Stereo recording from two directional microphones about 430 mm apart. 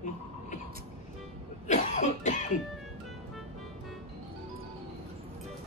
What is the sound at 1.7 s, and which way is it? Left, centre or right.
Cough, centre.